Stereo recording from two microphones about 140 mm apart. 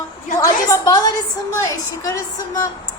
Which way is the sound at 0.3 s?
25° left (ahead or behind).